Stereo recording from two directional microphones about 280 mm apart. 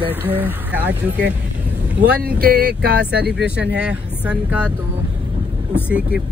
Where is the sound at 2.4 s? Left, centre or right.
Right.